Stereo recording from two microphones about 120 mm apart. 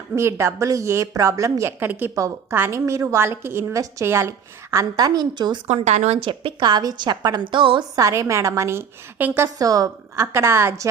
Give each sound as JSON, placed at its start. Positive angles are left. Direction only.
{"t": 0.2, "sound": "a woman's voice", "side_deg": -25}
{"t": 5.6, "sound": "speech", "side_deg": -65}
{"t": 6.1, "sound": "a woman's voice", "side_deg": -45}
{"t": 7.9, "sound": "a woman's voice", "side_deg": -25}
{"t": 9.6, "sound": "a woman's voice", "side_deg": -30}